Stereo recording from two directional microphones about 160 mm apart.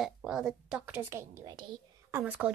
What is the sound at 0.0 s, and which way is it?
A woman's voice, 5° right (ahead or behind).